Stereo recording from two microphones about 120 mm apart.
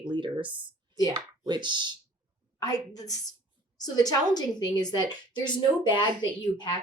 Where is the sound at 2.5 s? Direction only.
30° left (ahead or behind).